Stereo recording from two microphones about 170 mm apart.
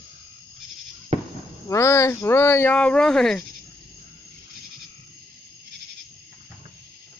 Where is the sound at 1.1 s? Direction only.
40° right (ahead or behind).